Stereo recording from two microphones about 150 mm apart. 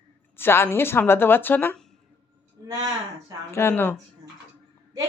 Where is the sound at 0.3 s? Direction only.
15° left (ahead or behind).